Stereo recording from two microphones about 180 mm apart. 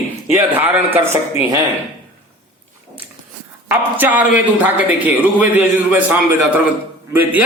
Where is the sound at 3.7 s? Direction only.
10° right (ahead or behind).